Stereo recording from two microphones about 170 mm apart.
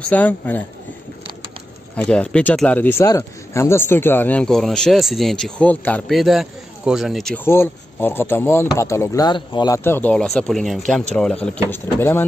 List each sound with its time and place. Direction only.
0.1 s speech: 10° left (ahead or behind)
2.0 s speech: 5° left (ahead or behind)
7.4 s speech: 15° left (ahead or behind)
9.8 s speech: 10° left (ahead or behind)
11.7 s speech: 15° left (ahead or behind)